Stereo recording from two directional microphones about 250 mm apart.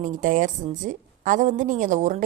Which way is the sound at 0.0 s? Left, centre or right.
Right.